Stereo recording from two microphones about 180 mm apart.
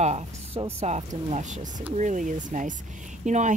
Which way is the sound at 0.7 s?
40° right (ahead or behind).